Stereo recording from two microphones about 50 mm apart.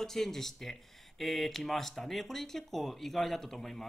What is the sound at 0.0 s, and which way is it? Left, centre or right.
Speech, centre.